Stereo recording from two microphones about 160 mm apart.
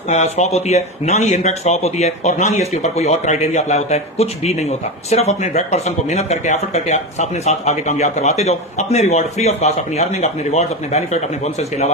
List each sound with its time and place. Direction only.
0.1 s speech: 45° left (ahead or behind)